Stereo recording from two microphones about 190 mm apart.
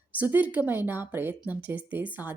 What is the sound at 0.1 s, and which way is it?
Speech, 10° right (ahead or behind).